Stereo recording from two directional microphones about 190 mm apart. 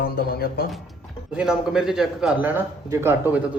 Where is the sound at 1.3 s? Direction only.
5° right (ahead or behind).